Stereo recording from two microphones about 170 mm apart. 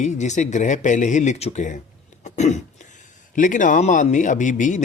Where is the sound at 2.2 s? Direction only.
45° left (ahead or behind).